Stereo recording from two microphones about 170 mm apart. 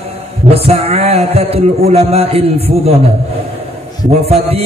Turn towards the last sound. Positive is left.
turn(degrees=-35)  # may be behind; listen again after turning